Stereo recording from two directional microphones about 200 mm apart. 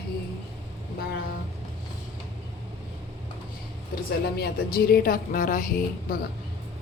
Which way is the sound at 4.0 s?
50° left (ahead or behind).